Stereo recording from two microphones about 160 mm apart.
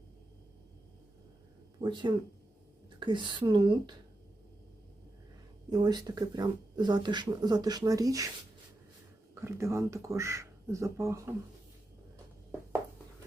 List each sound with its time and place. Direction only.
1.8 s speech: 30° right (ahead or behind)
5.7 s speech: 25° right (ahead or behind)
9.3 s speech: 15° right (ahead or behind)